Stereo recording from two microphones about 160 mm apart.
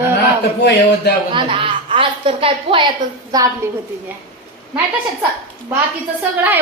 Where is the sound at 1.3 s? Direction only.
35° right (ahead or behind).